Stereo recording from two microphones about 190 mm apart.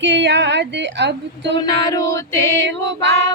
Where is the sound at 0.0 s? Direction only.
70° right (ahead or behind).